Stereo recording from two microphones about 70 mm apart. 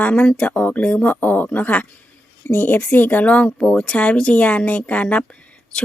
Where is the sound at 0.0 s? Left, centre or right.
Centre.